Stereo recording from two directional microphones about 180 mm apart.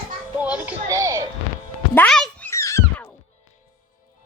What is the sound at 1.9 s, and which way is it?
Speech, 5° left (ahead or behind).